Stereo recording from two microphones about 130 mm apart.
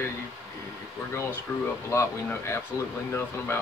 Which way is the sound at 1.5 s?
15° left (ahead or behind).